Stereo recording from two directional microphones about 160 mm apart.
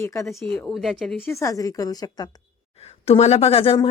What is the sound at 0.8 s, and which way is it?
Speech, 5° left (ahead or behind).